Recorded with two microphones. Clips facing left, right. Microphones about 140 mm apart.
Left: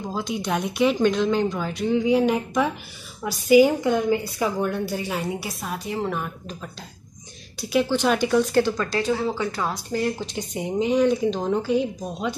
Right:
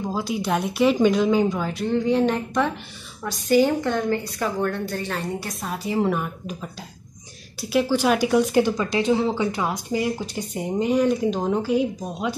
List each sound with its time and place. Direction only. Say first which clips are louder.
0.1 s a woman's voice: right 1 dB; 5° right (ahead or behind)
7.7 s speech: right 1 dB; 5° right (ahead or behind)